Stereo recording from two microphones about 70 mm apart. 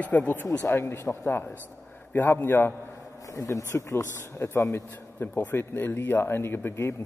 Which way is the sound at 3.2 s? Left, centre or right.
Left.